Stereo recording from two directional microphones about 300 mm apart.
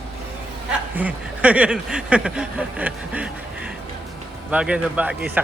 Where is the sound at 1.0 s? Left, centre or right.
Centre.